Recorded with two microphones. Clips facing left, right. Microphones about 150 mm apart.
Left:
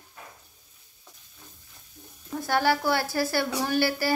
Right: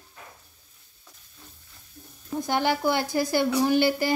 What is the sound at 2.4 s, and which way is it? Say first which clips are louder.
Frying: even; 20° right (ahead or behind).